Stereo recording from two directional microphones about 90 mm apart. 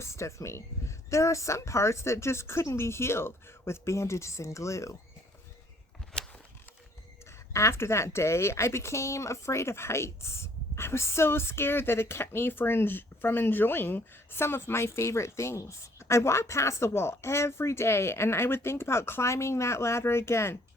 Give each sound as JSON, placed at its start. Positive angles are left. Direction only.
{"t": 0.0, "sound": "speech", "side_deg": 30}
{"t": 7.3, "sound": "speech", "side_deg": 30}